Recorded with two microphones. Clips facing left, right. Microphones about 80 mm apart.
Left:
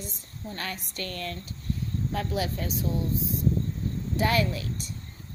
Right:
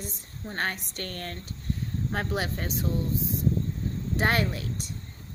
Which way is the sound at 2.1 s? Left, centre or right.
Right.